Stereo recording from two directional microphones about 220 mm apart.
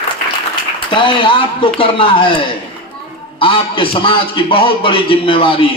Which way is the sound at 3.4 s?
25° left (ahead or behind).